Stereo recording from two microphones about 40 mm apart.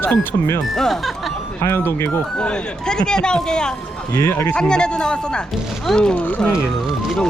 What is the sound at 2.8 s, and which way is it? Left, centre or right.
Speech, centre.